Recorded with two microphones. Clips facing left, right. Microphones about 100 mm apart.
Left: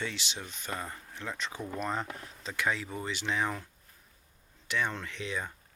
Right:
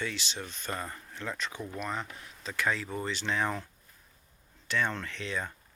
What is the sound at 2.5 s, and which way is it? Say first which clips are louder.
Speech: right 1 dB; 15° left (ahead or behind).